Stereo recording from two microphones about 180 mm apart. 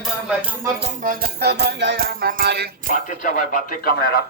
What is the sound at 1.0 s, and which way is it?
Music, 60° right (ahead or behind).